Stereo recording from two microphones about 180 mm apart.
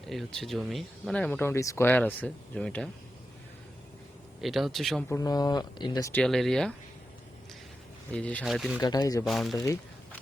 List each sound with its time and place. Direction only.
0.1 s speech: centre (ahead or behind)
4.4 s speech: centre (ahead or behind)
5.0 s speech: 20° left (ahead or behind)
6.2 s speech: centre (ahead or behind)
8.1 s speech: 5° left (ahead or behind)
8.8 s speech: 20° left (ahead or behind)
9.2 s speech: centre (ahead or behind)